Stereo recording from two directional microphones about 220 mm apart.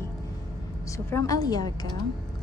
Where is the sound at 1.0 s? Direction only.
15° left (ahead or behind).